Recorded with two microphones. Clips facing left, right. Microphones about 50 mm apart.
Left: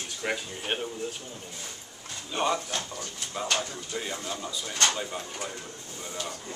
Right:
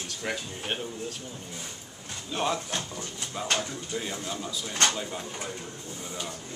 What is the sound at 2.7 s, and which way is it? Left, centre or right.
Speech, centre.